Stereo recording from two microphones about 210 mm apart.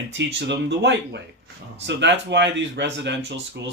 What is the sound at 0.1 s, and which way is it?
Speech, 55° right (ahead or behind).